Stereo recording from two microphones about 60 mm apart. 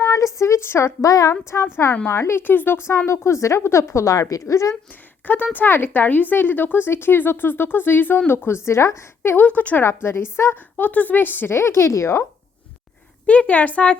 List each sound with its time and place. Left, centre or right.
0.0 s a sound: left
1.3 s speech: left
1.6 s a woman's voice: left
3.1 s a woman's voice: left
5.2 s a woman's voice: left
9.3 s a woman's voice: left
9.8 s a woman's voice: left
11.5 s speech: left
13.2 s a woman's voice: left